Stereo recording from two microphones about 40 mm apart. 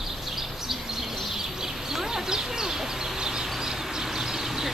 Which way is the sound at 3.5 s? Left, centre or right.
Centre.